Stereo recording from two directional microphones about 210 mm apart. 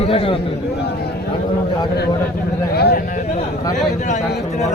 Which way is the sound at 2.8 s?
50° left (ahead or behind).